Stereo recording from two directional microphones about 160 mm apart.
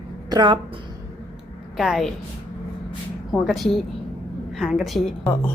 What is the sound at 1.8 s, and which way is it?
Speech, centre (ahead or behind).